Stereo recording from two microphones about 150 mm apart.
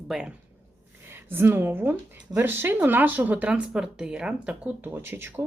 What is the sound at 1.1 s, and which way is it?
A woman's voice, 15° right (ahead or behind).